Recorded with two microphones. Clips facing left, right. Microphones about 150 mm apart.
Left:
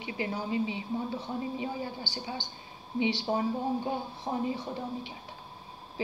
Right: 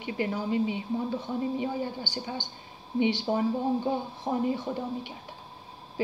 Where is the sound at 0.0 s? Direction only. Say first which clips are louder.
Right 4 dB; 50° right (ahead or behind).